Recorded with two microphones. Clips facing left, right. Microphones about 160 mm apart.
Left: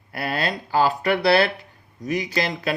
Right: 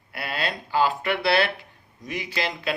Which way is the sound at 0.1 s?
40° left (ahead or behind).